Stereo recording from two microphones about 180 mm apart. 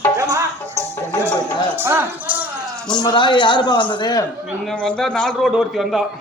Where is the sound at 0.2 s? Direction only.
20° right (ahead or behind).